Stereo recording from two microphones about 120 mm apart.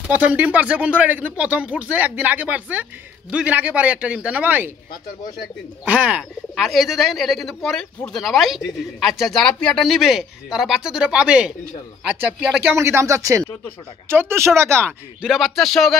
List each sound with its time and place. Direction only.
0.1 s speech: 10° right (ahead or behind)
5.9 s speech: 10° right (ahead or behind)
15.2 s speech: 5° right (ahead or behind)